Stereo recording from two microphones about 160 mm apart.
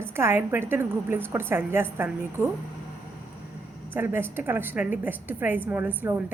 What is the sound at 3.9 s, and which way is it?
A woman's voice, 15° right (ahead or behind).